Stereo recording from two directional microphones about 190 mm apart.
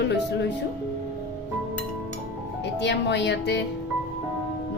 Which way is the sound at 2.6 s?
65° left (ahead or behind).